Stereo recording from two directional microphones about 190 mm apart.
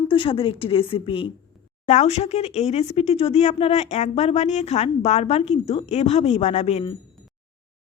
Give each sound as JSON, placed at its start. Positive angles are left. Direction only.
{"t": 0.1, "sound": "a woman's voice", "side_deg": 25}